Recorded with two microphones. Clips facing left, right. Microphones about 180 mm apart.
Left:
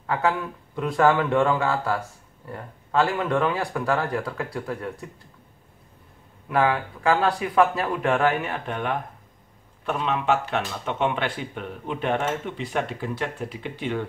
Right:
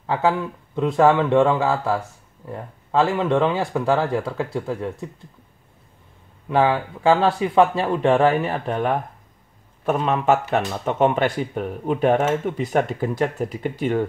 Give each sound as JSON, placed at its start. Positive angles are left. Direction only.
{"t": 0.0, "sound": "speech", "side_deg": -25}
{"t": 6.5, "sound": "speech", "side_deg": -30}